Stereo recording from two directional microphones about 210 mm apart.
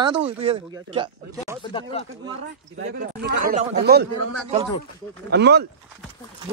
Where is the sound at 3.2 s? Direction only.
50° right (ahead or behind).